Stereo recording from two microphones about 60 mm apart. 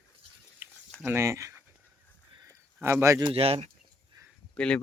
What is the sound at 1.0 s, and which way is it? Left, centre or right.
Speech, right.